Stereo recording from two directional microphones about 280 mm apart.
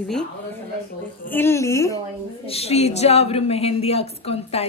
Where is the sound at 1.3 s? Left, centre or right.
Centre.